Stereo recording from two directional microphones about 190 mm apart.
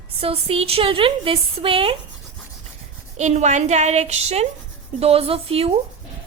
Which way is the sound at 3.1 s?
35° right (ahead or behind).